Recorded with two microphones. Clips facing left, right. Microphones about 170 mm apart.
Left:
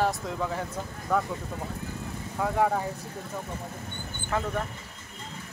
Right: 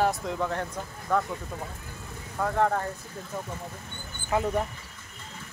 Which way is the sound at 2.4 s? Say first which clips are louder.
Even; 5° left (ahead or behind).